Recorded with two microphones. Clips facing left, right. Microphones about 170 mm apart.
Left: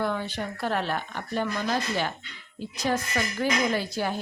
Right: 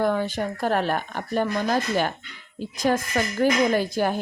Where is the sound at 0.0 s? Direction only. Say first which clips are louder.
Right 6 dB; 45° right (ahead or behind).